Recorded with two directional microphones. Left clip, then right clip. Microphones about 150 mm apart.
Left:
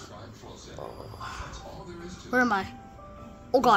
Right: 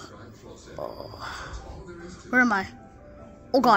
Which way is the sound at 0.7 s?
30° right (ahead or behind).